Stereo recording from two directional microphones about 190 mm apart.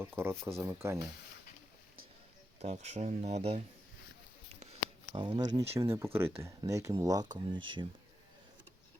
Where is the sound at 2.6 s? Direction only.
35° right (ahead or behind).